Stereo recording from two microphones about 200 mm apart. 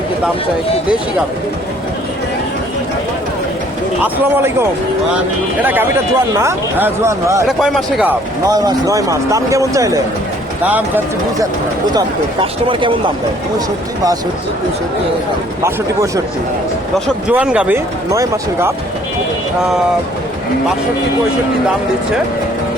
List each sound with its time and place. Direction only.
4.0 s speech: 10° right (ahead or behind)
5.6 s speech: 10° right (ahead or behind)
7.4 s speech: centre (ahead or behind)
8.4 s speech: 15° right (ahead or behind)
11.9 s speech: 25° right (ahead or behind)
15.6 s speech: 15° right (ahead or behind)
17.2 s speech: 5° right (ahead or behind)